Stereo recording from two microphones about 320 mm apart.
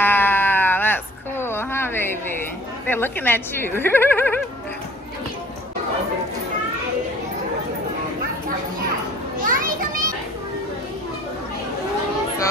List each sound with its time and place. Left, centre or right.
0.0 s a sound: centre
2.9 s a woman's voice: centre
9.5 s children playing: right